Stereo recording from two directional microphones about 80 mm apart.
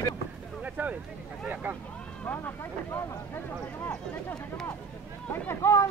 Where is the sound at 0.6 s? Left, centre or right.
Centre.